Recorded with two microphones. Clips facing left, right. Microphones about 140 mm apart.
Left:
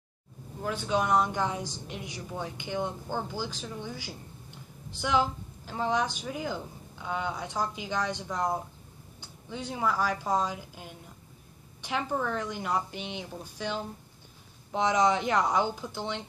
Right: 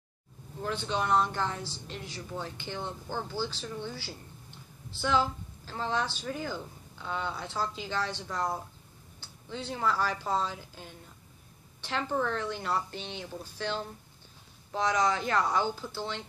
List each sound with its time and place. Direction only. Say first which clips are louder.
0.6 s speech: left 3 dB; 10° left (ahead or behind)